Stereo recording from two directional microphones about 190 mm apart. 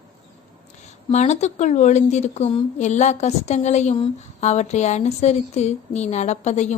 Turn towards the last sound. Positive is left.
turn(degrees=35)  # may be behind; listen again after turning